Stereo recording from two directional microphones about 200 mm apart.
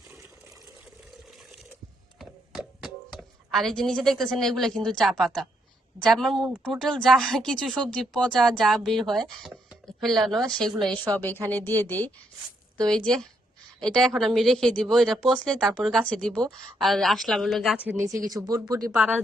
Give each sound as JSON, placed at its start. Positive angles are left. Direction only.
{"t": 2.1, "sound": "a sound", "side_deg": 0}
{"t": 6.0, "sound": "speech", "side_deg": 0}
{"t": 18.3, "sound": "speech", "side_deg": -20}
{"t": 18.9, "sound": "speech", "side_deg": -5}